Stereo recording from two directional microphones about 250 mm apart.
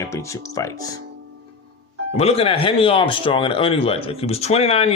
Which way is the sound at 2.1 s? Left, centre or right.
Left.